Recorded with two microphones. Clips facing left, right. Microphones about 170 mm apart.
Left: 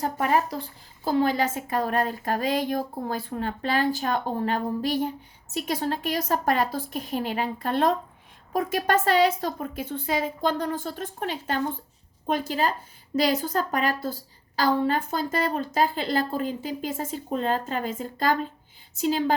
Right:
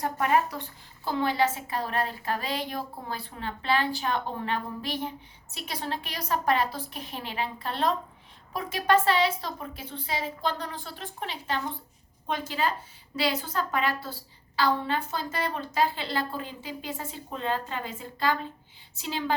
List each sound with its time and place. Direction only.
0.0 s a woman's voice: 35° left (ahead or behind)